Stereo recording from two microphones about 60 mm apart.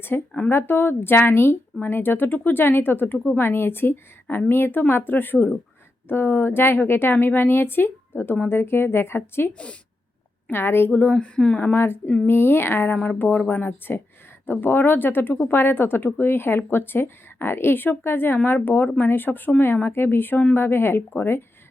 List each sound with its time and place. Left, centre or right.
0.1 s speech: left
10.5 s speech: left
11.2 s speech: centre
11.6 s speech: left